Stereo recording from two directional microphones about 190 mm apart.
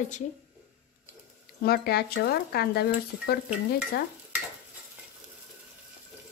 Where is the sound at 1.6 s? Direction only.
55° left (ahead or behind).